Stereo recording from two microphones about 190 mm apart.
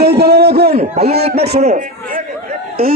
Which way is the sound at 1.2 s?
35° right (ahead or behind).